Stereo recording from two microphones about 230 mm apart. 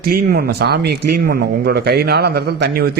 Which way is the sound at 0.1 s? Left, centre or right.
Right.